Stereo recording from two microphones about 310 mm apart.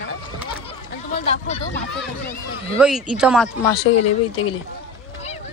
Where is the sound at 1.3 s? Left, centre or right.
Centre.